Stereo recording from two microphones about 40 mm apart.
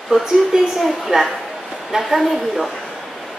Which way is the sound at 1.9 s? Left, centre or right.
Centre.